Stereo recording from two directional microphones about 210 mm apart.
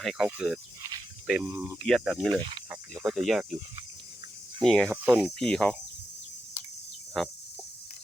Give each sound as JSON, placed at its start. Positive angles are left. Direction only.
{"t": 0.0, "sound": "speech", "side_deg": 0}
{"t": 1.3, "sound": "speech", "side_deg": -10}
{"t": 1.9, "sound": "speech", "side_deg": 0}
{"t": 2.3, "sound": "speech", "side_deg": -25}
{"t": 2.6, "sound": "speech", "side_deg": -5}
{"t": 4.6, "sound": "speech", "side_deg": 5}
{"t": 4.9, "sound": "speech", "side_deg": -10}
{"t": 5.4, "sound": "speech", "side_deg": 5}
{"t": 7.2, "sound": "speech", "side_deg": 0}